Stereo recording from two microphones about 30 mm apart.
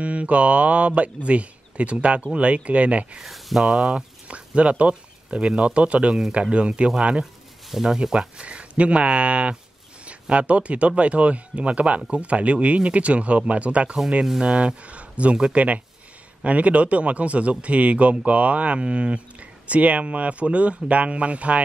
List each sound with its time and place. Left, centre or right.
0.0 s speech: right
3.2 s speech: centre
3.6 s speech: centre
3.9 s speech: right
7.7 s speech: centre
8.4 s speech: right
14.9 s a sound: right
15.5 s speech: right